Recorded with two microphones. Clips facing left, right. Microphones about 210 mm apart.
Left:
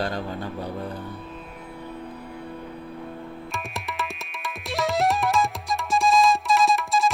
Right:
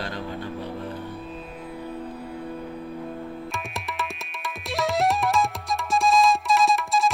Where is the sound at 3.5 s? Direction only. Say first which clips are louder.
Even; centre (ahead or behind).